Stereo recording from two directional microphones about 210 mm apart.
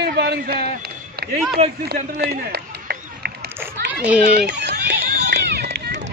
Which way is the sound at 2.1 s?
50° right (ahead or behind).